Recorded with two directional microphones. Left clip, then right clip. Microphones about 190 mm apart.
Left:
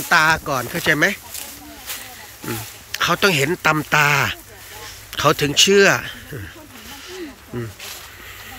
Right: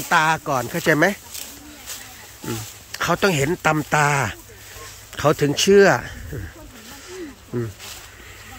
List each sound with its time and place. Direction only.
0.1 s speech: 15° right (ahead or behind)
2.9 s speech: 20° right (ahead or behind)